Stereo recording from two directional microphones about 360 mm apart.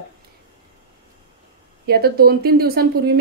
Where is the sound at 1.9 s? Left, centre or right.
Right.